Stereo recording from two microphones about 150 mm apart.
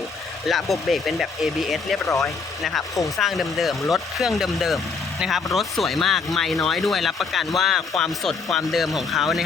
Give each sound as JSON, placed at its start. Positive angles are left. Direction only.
{"t": 0.4, "sound": "speech", "side_deg": 0}
{"t": 2.0, "sound": "speech", "side_deg": 20}
{"t": 2.6, "sound": "speech", "side_deg": 0}